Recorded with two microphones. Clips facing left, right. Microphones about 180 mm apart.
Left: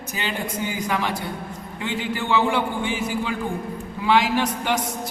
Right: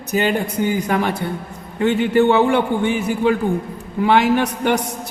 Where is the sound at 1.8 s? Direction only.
55° right (ahead or behind).